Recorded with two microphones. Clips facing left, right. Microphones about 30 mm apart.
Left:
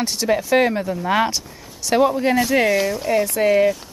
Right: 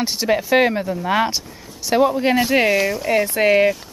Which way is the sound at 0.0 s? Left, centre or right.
Centre.